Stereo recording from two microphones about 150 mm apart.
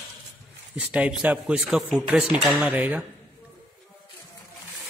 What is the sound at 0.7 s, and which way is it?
A man's voice, 10° right (ahead or behind).